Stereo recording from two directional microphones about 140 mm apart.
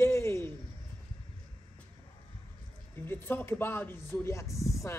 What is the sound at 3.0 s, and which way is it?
Speech, 15° left (ahead or behind).